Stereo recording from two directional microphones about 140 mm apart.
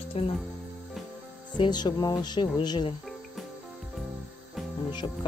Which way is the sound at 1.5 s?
35° left (ahead or behind).